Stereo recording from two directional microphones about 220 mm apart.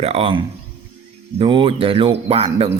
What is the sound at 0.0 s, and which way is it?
Speech, 25° right (ahead or behind).